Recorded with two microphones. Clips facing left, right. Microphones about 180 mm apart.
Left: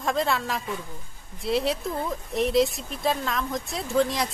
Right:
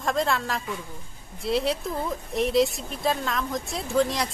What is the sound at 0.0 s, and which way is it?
Speech, centre (ahead or behind).